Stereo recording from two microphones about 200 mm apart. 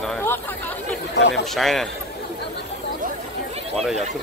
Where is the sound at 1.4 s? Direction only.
Centre (ahead or behind).